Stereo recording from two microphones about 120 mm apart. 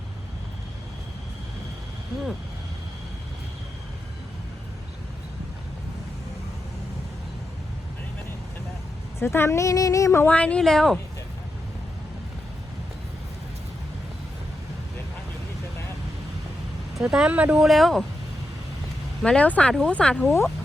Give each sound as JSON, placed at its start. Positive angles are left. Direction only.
{"t": 9.1, "sound": "speech", "side_deg": 20}
{"t": 10.3, "sound": "speech", "side_deg": 10}
{"t": 17.0, "sound": "speech", "side_deg": -5}
{"t": 19.2, "sound": "speech", "side_deg": 10}